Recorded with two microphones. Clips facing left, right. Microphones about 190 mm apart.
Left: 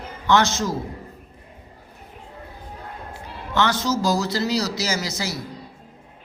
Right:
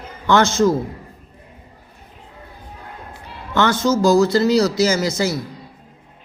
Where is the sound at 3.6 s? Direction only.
50° right (ahead or behind).